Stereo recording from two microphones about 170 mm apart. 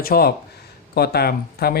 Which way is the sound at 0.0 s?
65° left (ahead or behind).